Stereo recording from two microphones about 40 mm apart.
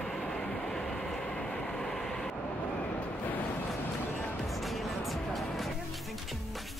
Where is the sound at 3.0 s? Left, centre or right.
Left.